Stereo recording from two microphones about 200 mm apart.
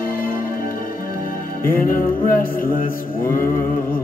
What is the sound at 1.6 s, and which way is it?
Music, 45° left (ahead or behind).